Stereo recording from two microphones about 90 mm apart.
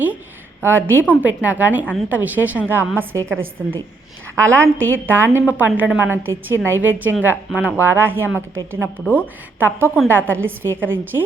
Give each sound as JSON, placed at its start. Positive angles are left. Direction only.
{"t": 0.6, "sound": "a woman's voice", "side_deg": -25}
{"t": 4.4, "sound": "a woman's voice", "side_deg": -30}